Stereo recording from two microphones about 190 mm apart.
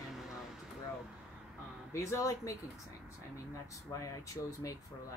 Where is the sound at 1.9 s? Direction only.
15° left (ahead or behind).